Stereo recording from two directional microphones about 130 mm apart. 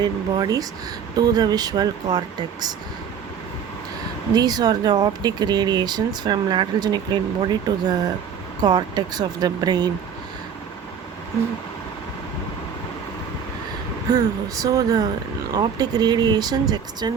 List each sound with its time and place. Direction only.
0.0 s speech: 30° right (ahead or behind)
4.4 s speech: 30° right (ahead or behind)
14.1 s speech: 30° right (ahead or behind)